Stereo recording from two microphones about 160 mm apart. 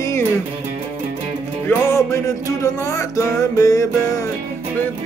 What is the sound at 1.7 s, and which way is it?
Music, 15° left (ahead or behind).